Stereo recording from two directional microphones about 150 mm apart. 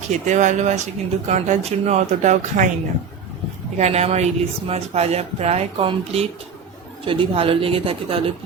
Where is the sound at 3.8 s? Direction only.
45° right (ahead or behind).